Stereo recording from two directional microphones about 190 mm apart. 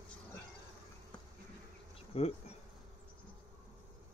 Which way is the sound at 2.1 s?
35° left (ahead or behind).